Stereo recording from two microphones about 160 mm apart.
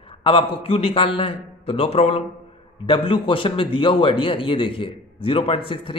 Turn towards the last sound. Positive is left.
turn(degrees=35)  # may be behind; listen again after turning